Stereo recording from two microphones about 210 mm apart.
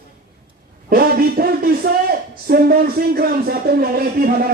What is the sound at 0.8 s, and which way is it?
A man's voice, 45° right (ahead or behind).